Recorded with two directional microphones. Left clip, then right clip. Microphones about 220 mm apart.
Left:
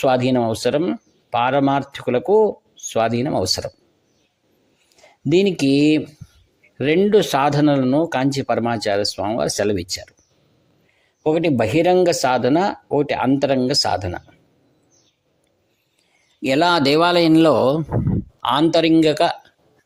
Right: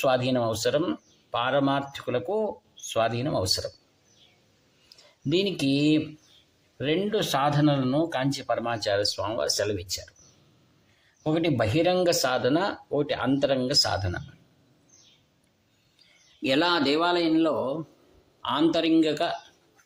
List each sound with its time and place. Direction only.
0.0 s speech: 35° left (ahead or behind)
5.3 s speech: 25° left (ahead or behind)
11.2 s speech: 30° left (ahead or behind)
16.4 s speech: 30° left (ahead or behind)